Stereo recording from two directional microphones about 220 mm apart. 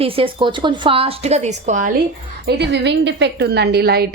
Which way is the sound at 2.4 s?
50° right (ahead or behind).